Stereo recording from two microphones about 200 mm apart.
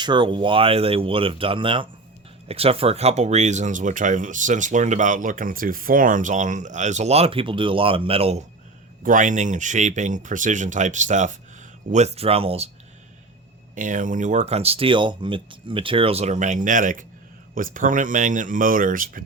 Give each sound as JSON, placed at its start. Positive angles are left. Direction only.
{"t": 0.0, "sound": "speech", "side_deg": -25}
{"t": 9.0, "sound": "speech", "side_deg": -40}
{"t": 13.7, "sound": "speech", "side_deg": -40}